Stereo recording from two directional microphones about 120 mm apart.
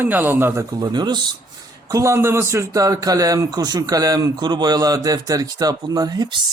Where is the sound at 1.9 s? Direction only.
25° right (ahead or behind).